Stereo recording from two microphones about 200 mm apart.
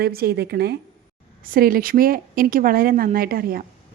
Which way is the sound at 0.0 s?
50° right (ahead or behind).